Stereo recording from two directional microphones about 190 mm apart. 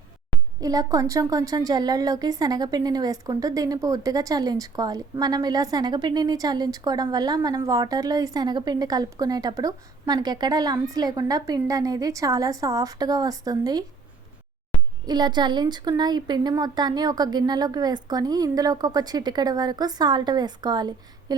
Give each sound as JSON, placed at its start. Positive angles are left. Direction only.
{"t": 0.6, "sound": "a woman's voice", "side_deg": -20}
{"t": 15.0, "sound": "a woman's voice", "side_deg": -20}